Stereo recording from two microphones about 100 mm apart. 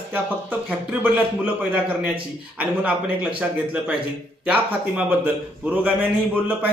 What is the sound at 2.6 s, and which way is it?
A man's voice, 15° right (ahead or behind).